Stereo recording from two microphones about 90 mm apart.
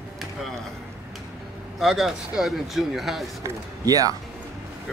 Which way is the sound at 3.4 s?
45° right (ahead or behind).